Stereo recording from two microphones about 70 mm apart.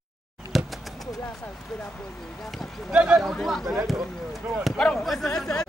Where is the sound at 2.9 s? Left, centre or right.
Centre.